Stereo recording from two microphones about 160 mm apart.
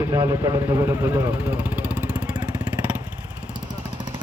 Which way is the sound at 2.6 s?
10° right (ahead or behind).